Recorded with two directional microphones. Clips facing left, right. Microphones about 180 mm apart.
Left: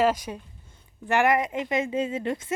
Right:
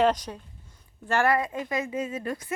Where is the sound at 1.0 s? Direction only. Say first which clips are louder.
Left 2 dB; 20° left (ahead or behind).